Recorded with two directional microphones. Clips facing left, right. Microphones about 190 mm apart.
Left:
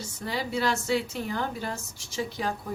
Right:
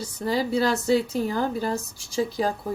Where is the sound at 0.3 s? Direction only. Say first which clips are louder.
Right 6 dB; 35° right (ahead or behind).